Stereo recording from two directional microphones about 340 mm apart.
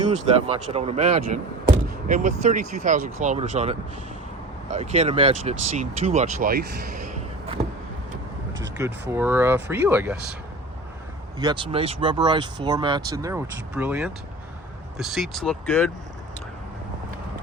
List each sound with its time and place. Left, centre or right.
0.3 s speech: centre
8.6 s speech: centre
11.3 s speech: centre